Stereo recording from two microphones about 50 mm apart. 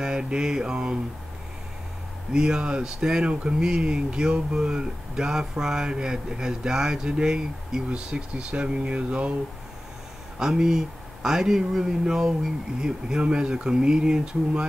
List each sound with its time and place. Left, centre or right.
0.0 s mantra: centre
2.3 s speech: centre
10.4 s speech: centre